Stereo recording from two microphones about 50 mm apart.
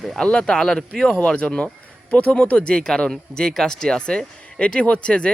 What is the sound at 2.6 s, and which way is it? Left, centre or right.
Speech, centre.